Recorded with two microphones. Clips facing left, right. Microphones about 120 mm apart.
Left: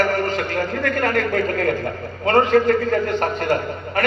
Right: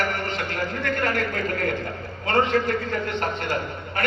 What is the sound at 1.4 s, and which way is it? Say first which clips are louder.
A man's voice: left 6 dB; 40° left (ahead or behind).